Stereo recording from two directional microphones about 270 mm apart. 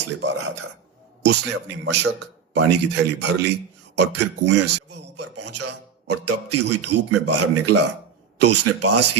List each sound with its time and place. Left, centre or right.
1.2 s a man's voice: right
5.1 s a man's voice: right